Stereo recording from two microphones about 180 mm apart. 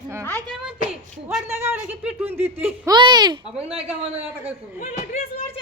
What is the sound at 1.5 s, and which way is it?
A woman's voice, 15° right (ahead or behind).